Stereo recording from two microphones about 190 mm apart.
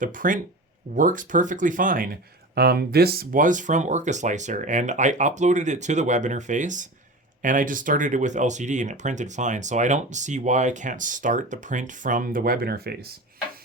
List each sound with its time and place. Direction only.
0.0 s speech: 45° right (ahead or behind)